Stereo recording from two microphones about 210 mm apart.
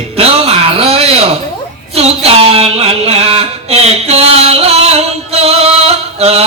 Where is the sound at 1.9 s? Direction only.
30° right (ahead or behind).